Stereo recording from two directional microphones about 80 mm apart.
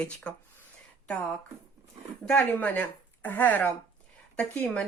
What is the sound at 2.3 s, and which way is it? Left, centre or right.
Speech, left.